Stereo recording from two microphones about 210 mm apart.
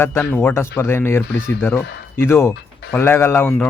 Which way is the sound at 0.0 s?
10° left (ahead or behind).